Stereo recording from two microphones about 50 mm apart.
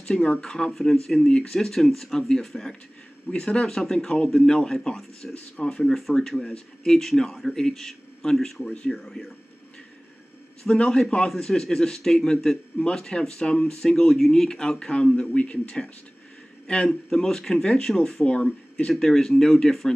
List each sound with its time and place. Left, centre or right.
0.0 s a man's voice: left
5.3 s speech: left
5.9 s a man's voice: centre
10.7 s a man's voice: centre
16.6 s a man's voice: centre
18.9 s a man's voice: centre